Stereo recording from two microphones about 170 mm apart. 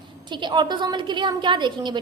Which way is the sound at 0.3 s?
25° right (ahead or behind).